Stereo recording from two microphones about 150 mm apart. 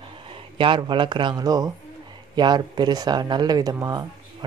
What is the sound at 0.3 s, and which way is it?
Speech, 35° right (ahead or behind).